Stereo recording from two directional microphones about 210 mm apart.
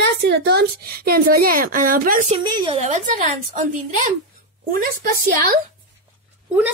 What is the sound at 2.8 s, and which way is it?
Speech, 35° right (ahead or behind).